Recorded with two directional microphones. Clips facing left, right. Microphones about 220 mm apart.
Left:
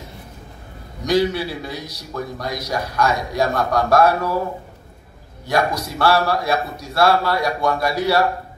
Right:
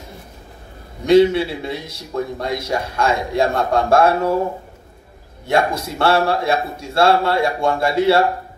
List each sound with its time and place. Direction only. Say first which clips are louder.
1.0 s a man's voice: right 6 dB; 25° right (ahead or behind)
5.5 s a man's voice: right 2 dB; 25° right (ahead or behind)